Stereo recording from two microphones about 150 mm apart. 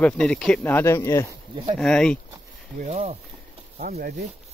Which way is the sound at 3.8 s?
90° right.